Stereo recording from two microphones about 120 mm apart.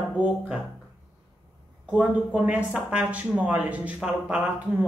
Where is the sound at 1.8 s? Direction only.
10° right (ahead or behind).